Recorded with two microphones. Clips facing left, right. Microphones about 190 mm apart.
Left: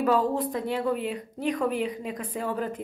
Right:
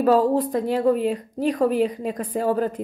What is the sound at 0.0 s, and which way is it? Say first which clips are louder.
A woman's voice: right 6 dB; 40° right (ahead or behind).